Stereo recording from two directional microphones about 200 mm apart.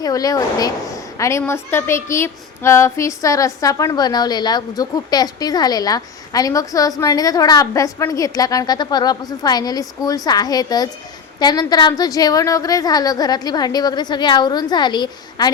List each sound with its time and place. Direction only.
0.0 s a woman's voice: 15° left (ahead or behind)